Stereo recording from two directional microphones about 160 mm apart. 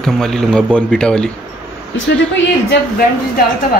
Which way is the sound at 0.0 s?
5° left (ahead or behind).